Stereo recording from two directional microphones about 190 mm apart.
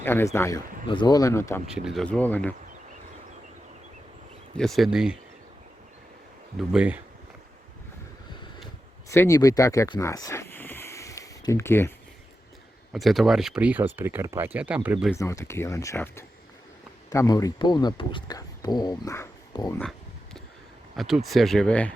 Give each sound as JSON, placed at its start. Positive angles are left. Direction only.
{"t": 0.0, "sound": "a man's voice", "side_deg": 10}
{"t": 1.6, "sound": "speech", "side_deg": -5}
{"t": 4.5, "sound": "speech", "side_deg": 0}
{"t": 6.6, "sound": "speech", "side_deg": -5}
{"t": 9.0, "sound": "speech", "side_deg": 15}
{"t": 12.9, "sound": "speech", "side_deg": 0}
{"t": 15.1, "sound": "speech", "side_deg": 15}
{"t": 20.9, "sound": "speech", "side_deg": 0}